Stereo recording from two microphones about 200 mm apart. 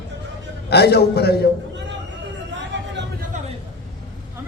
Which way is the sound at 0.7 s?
55° left (ahead or behind).